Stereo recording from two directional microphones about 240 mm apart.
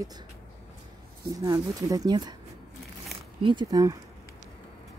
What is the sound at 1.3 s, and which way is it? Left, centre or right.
Speech, centre.